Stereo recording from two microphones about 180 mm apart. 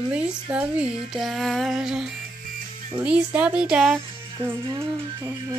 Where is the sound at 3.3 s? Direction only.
5° right (ahead or behind).